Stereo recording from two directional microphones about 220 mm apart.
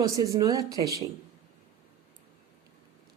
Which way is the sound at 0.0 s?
15° right (ahead or behind).